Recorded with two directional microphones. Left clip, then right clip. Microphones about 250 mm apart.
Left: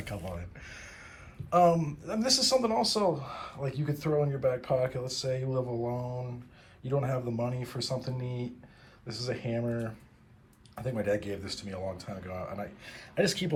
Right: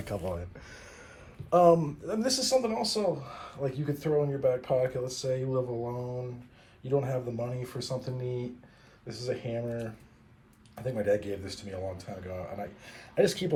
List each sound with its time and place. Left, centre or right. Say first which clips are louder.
0.1 s speech: right 8 dB; centre